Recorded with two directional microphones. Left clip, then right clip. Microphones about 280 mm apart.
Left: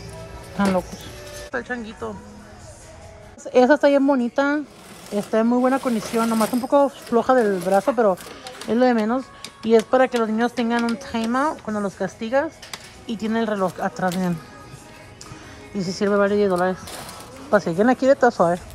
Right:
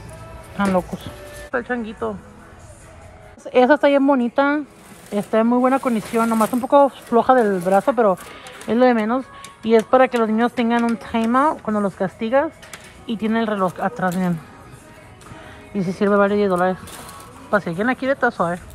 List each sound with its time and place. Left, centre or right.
0.7 s speech: centre
3.4 s speech: centre
15.7 s speech: centre